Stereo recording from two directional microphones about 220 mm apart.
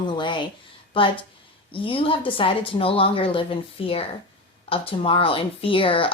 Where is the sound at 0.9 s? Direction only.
25° left (ahead or behind).